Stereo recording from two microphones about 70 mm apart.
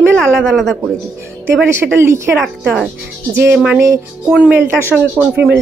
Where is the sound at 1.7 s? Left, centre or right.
Right.